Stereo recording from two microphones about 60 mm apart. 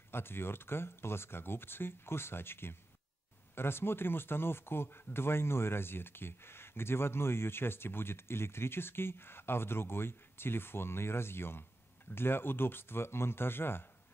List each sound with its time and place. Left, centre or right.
0.1 s speech: left